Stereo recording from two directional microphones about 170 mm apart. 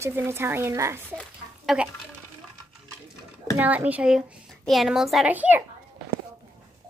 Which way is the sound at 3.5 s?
10° right (ahead or behind).